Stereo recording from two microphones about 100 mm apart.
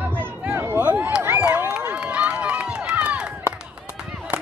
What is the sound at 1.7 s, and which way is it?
Run, 10° right (ahead or behind).